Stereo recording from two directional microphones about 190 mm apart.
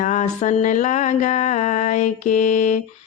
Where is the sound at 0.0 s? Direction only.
40° left (ahead or behind).